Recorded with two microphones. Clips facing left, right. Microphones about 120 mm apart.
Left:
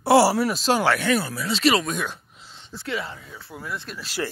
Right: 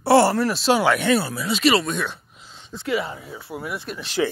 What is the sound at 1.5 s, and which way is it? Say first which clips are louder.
Speech: right 2 dB; 5° right (ahead or behind).